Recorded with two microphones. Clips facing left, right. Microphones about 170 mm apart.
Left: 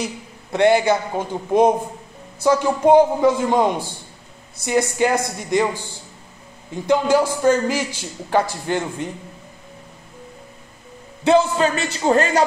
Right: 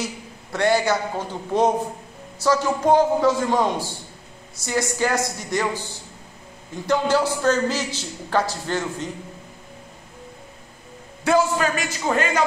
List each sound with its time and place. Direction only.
0.5 s a man's voice: 20° left (ahead or behind)
6.9 s a man's voice: 15° left (ahead or behind)
11.2 s speech: 25° left (ahead or behind)